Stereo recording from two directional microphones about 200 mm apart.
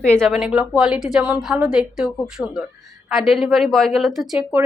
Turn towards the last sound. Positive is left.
turn(degrees=0)  # may be behind; listen again after turning